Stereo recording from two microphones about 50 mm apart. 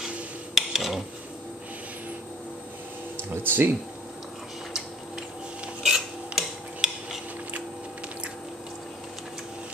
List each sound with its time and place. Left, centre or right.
0.6 s mechanisms: centre
3.4 s speech: right
5.8 s filing: centre